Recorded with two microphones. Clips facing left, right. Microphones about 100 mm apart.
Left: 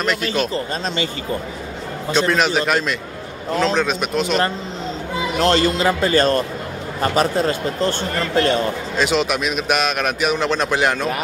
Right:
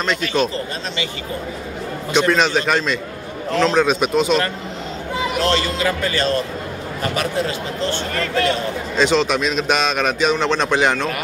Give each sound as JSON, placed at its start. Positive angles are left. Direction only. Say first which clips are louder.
{"t": 2.1, "sound": "a man's voice", "louder": "right 1 dB", "side_deg": 0}
{"t": 5.4, "sound": "a man's voice", "louder": "left 4 dB", "side_deg": 35}
{"t": 6.1, "sound": "a man's voice", "louder": "left 3 dB", "side_deg": 45}
{"t": 8.9, "sound": "a man's voice", "louder": "right 3 dB", "side_deg": 5}